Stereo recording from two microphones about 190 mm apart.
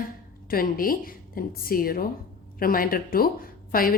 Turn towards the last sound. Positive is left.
turn(degrees=50)  # may be behind; listen again after turning